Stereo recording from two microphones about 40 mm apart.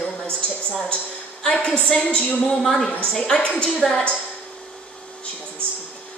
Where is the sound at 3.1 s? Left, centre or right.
Centre.